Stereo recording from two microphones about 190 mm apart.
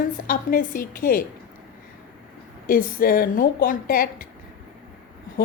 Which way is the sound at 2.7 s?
50° left (ahead or behind).